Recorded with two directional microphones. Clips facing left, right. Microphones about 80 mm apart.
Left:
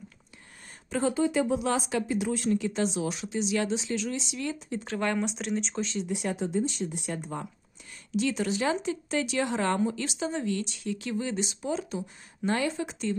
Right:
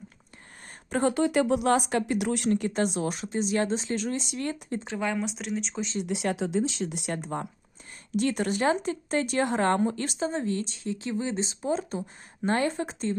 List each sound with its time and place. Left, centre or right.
0.9 s speech: right
4.9 s speech: centre
6.1 s speech: right
8.1 s speech: right